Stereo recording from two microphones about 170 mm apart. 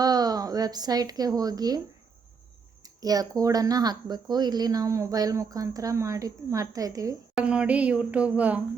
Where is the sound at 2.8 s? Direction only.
20° right (ahead or behind).